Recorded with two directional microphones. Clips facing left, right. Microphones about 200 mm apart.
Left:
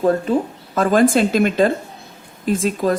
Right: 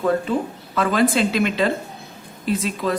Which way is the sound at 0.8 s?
45° left (ahead or behind).